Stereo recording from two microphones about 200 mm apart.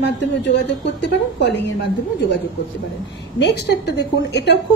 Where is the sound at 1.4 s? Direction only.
60° left (ahead or behind).